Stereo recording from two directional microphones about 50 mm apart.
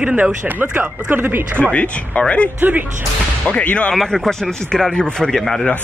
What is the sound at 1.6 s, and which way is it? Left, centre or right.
Speech, left.